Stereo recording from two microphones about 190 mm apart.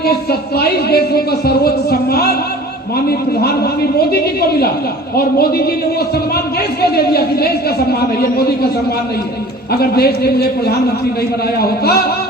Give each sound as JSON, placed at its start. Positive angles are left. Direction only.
{"t": 0.0, "sound": "speech", "side_deg": 55}
{"t": 6.8, "sound": "speech", "side_deg": 55}
{"t": 9.7, "sound": "speech", "side_deg": 55}